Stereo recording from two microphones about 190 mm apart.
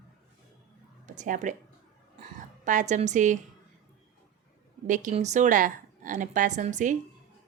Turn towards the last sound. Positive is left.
turn(degrees=-40)  # may be behind; listen again after turning